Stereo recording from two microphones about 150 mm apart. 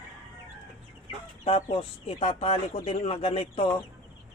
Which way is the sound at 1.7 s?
40° left (ahead or behind).